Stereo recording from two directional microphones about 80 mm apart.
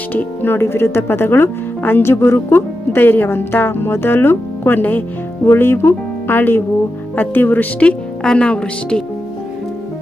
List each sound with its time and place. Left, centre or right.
0.1 s a woman's voice: left